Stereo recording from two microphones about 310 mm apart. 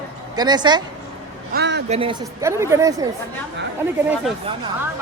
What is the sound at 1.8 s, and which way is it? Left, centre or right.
Speech, centre.